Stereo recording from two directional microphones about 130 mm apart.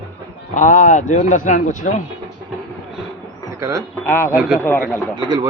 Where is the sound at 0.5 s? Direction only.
75° left (ahead or behind).